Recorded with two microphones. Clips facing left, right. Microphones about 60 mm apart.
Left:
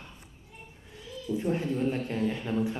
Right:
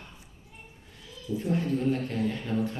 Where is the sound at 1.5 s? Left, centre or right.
Left.